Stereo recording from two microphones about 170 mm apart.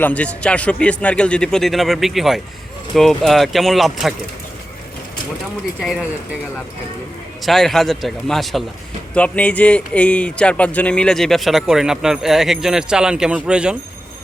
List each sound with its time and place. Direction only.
0.0 s speech: 5° left (ahead or behind)
5.8 s speech: 5° right (ahead or behind)
7.4 s speech: centre (ahead or behind)